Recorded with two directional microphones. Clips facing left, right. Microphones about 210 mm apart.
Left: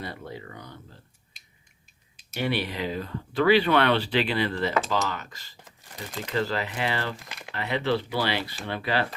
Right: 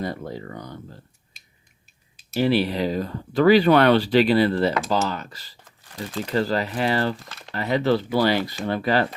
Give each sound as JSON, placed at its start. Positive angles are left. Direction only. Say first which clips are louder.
{"t": 0.0, "sound": "speech", "louder": "right 7 dB", "side_deg": -40}
{"t": 2.3, "sound": "speech", "louder": "right 8 dB", "side_deg": -35}
{"t": 7.3, "sound": "crumpling", "louder": "left 1 dB", "side_deg": 10}
{"t": 7.5, "sound": "speech", "louder": "right 5 dB", "side_deg": -40}